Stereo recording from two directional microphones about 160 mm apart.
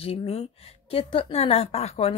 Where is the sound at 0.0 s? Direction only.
40° left (ahead or behind).